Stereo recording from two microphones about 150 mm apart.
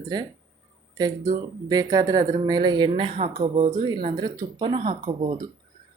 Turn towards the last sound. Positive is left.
turn(degrees=-35)  # may be behind; listen again after turning